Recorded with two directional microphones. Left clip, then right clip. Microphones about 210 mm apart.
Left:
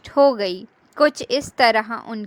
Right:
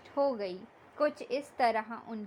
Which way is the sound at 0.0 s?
40° left (ahead or behind).